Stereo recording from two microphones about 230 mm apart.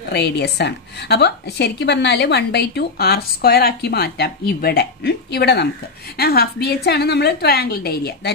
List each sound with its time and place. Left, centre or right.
0.1 s a woman's voice: left